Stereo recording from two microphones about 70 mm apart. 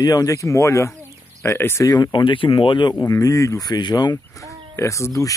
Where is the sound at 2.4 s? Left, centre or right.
Left.